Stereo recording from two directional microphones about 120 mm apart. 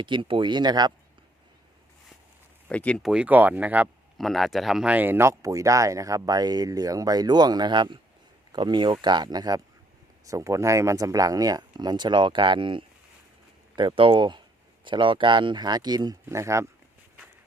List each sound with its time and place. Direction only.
0.0 s speech: 45° right (ahead or behind)
2.6 s speech: 10° left (ahead or behind)
3.0 s speech: 5° right (ahead or behind)
4.2 s speech: centre (ahead or behind); by 16.6 s 25° right (ahead or behind)